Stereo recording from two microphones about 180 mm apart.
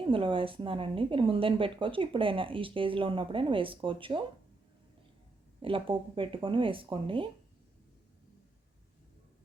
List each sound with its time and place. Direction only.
0.0 s speech: 30° right (ahead or behind)
5.6 s speech: 30° right (ahead or behind)